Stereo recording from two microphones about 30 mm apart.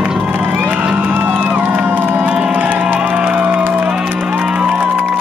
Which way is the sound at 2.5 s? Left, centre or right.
Right.